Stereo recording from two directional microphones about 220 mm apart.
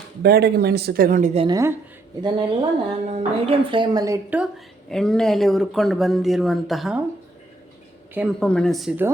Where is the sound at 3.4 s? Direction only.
25° right (ahead or behind); by 7.0 s centre (ahead or behind).